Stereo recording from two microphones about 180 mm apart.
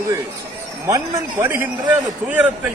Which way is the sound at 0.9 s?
15° right (ahead or behind).